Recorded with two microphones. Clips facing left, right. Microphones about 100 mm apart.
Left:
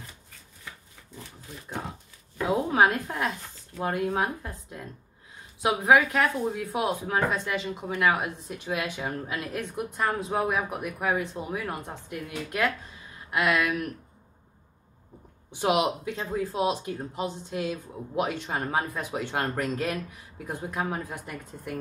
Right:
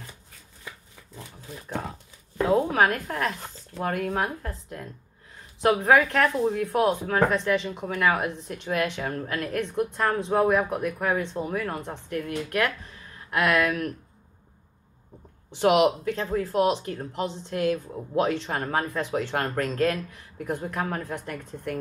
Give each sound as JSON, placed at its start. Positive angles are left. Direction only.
{"t": 2.5, "sound": "speech", "side_deg": 15}
{"t": 5.6, "sound": "speech", "side_deg": 5}
{"t": 13.3, "sound": "speech", "side_deg": 5}
{"t": 15.5, "sound": "speech", "side_deg": 15}